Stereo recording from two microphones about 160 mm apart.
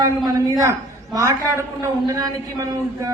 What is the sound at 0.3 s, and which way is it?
A woman's voice, 20° right (ahead or behind).